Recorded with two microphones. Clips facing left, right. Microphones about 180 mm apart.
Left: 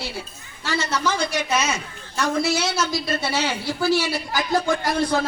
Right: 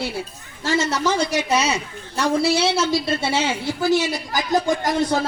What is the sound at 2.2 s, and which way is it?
A woman's voice, 30° right (ahead or behind).